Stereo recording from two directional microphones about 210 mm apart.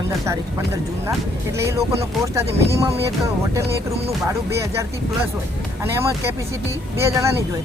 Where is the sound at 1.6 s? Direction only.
15° right (ahead or behind).